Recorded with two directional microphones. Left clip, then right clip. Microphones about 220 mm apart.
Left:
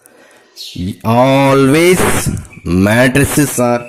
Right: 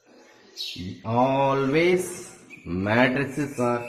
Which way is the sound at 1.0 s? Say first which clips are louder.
Left 12 dB; 45° left (ahead or behind).